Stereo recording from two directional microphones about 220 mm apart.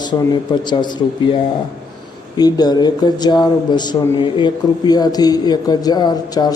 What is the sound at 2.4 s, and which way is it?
Speech, 20° left (ahead or behind).